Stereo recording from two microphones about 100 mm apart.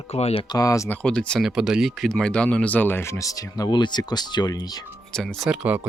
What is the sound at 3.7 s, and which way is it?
Speech, 50° left (ahead or behind).